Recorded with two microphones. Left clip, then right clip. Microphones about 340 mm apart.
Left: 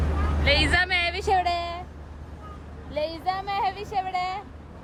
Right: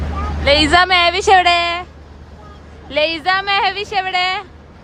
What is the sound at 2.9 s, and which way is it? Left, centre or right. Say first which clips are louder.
Speech: right 12 dB; right.